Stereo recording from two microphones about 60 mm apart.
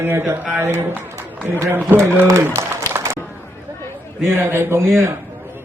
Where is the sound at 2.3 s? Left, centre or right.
Right.